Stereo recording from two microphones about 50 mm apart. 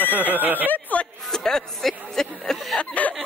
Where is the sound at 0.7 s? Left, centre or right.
Left.